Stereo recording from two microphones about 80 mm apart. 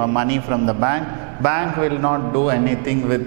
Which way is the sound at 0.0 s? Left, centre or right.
Centre.